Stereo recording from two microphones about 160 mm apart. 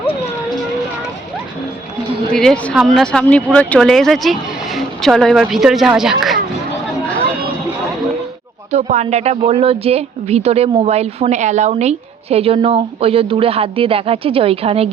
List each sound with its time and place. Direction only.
2.3 s speech: 5° left (ahead or behind)
8.7 s a woman's voice: 45° right (ahead or behind)